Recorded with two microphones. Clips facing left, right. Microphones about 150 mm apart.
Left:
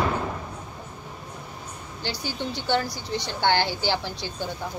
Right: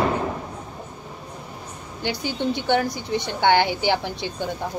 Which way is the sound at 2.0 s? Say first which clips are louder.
Right 6 dB; 20° right (ahead or behind).